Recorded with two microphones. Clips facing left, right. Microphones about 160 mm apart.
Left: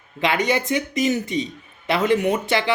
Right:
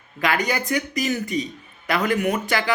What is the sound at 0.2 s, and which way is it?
Speech, 25° left (ahead or behind).